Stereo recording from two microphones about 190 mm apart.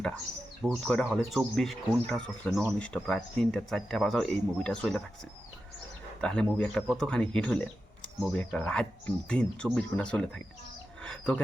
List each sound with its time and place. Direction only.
0.6 s speech: 5° left (ahead or behind)
6.2 s speech: 5° left (ahead or behind)